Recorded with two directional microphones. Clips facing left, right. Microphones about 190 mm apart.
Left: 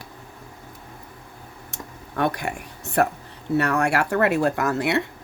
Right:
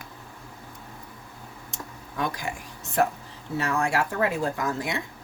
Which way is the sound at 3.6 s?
65° left (ahead or behind).